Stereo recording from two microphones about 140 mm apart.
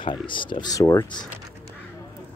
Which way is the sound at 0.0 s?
35° left (ahead or behind).